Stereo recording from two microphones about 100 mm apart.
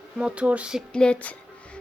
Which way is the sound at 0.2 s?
10° right (ahead or behind).